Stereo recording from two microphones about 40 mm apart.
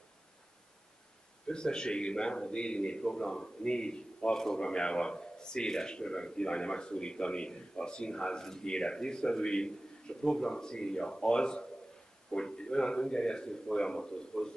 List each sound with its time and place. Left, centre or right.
1.5 s a man's voice: left